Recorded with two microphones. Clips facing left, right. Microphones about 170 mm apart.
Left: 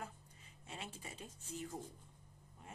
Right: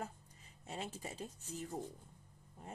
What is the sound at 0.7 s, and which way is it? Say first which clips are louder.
Speech: right 5 dB; 40° right (ahead or behind).